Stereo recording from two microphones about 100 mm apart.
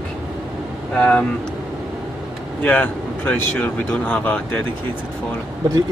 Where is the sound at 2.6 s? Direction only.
15° left (ahead or behind).